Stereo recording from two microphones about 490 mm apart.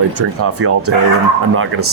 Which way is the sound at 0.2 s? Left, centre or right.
Right.